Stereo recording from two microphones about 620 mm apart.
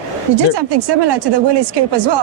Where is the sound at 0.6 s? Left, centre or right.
Right.